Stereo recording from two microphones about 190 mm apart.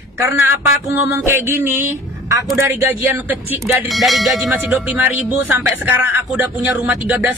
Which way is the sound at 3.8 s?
Centre (ahead or behind).